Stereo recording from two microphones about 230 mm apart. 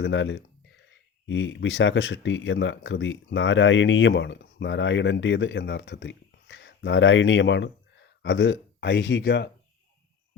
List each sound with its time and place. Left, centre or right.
0.0 s speech: left